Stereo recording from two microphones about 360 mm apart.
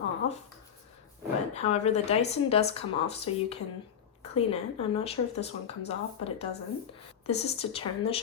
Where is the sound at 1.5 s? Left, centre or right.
Centre.